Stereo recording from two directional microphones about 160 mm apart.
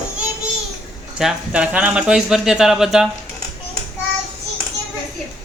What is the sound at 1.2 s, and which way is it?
Speech, 5° right (ahead or behind).